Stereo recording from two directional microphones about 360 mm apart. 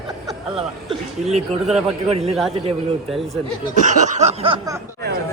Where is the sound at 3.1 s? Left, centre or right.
Centre.